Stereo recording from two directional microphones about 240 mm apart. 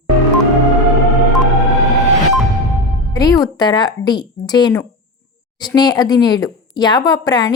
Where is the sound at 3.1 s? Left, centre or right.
Centre.